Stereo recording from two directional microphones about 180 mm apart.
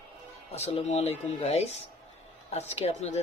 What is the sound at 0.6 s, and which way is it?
Speech, 35° left (ahead or behind).